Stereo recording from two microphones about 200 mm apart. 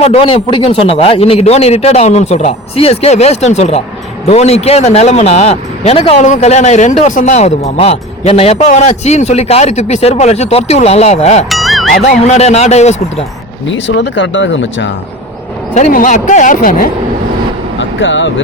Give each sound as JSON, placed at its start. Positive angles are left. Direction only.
{"t": 0.0, "sound": "speech", "side_deg": 30}
{"t": 11.4, "sound": "music", "side_deg": 0}
{"t": 12.2, "sound": "speech", "side_deg": 35}
{"t": 13.7, "sound": "speech", "side_deg": 65}
{"t": 15.7, "sound": "speech", "side_deg": 40}
{"t": 17.7, "sound": "speech", "side_deg": 65}